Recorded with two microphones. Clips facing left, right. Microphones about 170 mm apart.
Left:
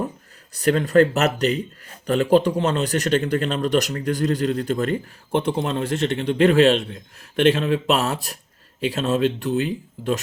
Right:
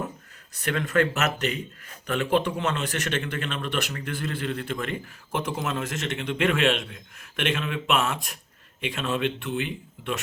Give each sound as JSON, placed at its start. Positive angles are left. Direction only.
{"t": 0.5, "sound": "speech", "side_deg": 35}